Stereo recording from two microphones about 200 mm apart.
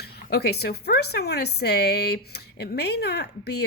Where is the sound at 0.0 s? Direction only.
55° left (ahead or behind).